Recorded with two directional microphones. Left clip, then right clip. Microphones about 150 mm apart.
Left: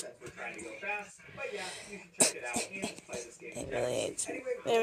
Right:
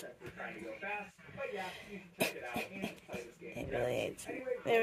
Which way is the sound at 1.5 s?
15° left (ahead or behind).